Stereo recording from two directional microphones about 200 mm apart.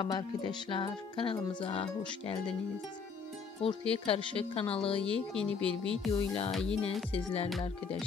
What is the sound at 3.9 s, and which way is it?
Speech, 25° left (ahead or behind).